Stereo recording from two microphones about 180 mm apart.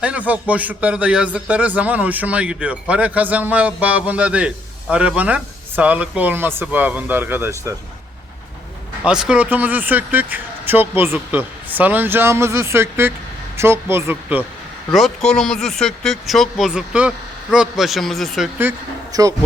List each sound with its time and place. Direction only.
0.0 s a man's voice: 10° right (ahead or behind)
9.0 s a man's voice: 5° right (ahead or behind)
14.9 s speech: centre (ahead or behind)
19.1 s speech: 20° right (ahead or behind)